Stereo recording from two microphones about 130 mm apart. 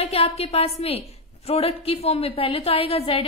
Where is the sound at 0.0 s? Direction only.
50° left (ahead or behind).